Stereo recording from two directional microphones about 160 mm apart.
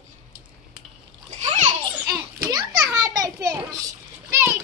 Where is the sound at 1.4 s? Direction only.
45° right (ahead or behind).